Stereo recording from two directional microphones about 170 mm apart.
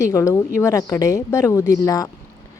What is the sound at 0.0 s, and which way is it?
A woman's voice, 15° left (ahead or behind).